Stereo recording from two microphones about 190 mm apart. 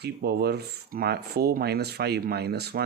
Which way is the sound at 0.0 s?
55° right (ahead or behind).